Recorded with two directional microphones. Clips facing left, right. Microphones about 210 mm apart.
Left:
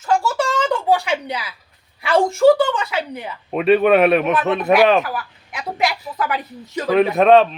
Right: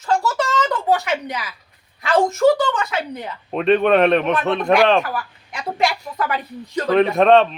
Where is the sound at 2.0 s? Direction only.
10° left (ahead or behind).